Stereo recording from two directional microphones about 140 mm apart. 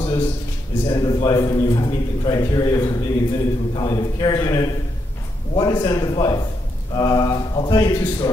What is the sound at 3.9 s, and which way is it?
A man's voice, 25° left (ahead or behind).